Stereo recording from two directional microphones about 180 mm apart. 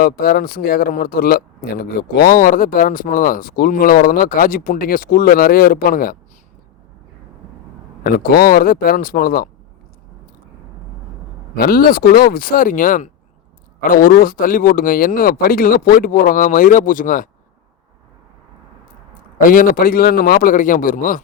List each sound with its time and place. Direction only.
0.0 s speech: 55° left (ahead or behind)
8.0 s speech: 55° left (ahead or behind)
11.5 s speech: 55° left (ahead or behind)
19.5 s speech: 50° left (ahead or behind)